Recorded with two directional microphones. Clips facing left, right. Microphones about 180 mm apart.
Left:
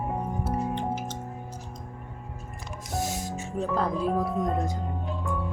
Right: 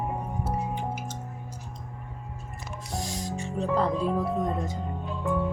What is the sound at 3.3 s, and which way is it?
Music, centre (ahead or behind).